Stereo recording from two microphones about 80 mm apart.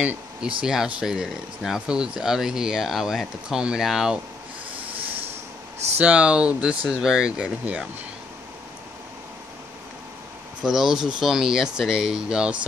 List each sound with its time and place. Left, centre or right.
0.0 s a sound: centre
0.6 s speech: centre
5.9 s speech: centre
10.6 s speech: centre